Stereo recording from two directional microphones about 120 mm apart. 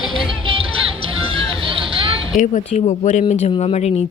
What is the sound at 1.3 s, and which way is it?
Hubbub, 50° right (ahead or behind).